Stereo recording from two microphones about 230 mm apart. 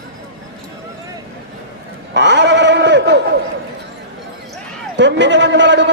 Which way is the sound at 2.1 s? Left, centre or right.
Right.